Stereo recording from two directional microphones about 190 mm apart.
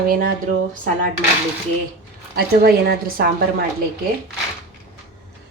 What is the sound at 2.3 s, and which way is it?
Speech, 55° right (ahead or behind).